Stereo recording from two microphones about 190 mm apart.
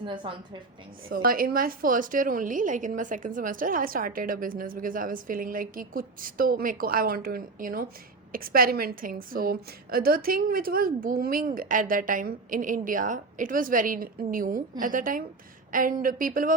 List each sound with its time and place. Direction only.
0.0 s a woman's voice: 25° right (ahead or behind)
1.1 s a woman's voice: 50° right (ahead or behind)